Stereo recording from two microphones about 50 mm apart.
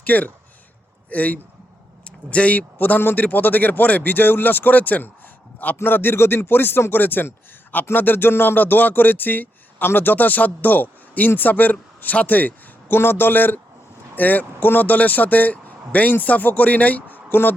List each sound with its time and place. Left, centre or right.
0.0 s speech: left